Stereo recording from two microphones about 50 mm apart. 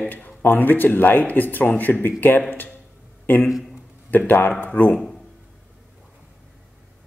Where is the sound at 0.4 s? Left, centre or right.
Left.